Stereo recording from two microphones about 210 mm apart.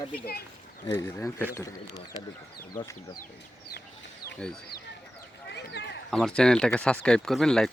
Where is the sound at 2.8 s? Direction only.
20° left (ahead or behind).